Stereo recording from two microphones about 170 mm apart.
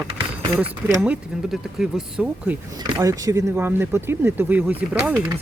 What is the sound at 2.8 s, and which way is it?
Speech, 20° right (ahead or behind).